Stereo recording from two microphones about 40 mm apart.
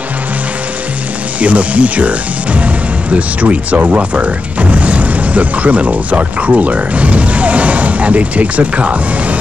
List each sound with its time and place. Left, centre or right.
1.4 s speech: right